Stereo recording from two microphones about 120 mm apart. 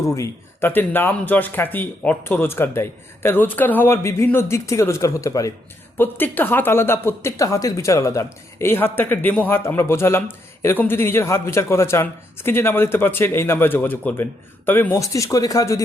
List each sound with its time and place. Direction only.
0.1 s speech: 20° left (ahead or behind)
6.0 s speech: 15° left (ahead or behind)